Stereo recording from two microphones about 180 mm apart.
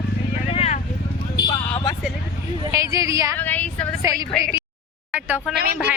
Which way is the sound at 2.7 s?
15° right (ahead or behind).